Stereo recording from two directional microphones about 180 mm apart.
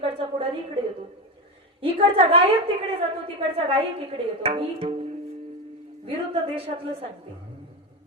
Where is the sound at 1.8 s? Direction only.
30° right (ahead or behind).